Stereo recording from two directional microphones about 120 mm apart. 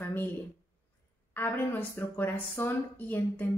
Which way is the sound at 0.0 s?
20° left (ahead or behind).